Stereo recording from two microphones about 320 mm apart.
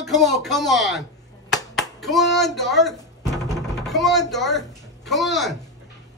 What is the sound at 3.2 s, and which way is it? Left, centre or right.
Music, centre.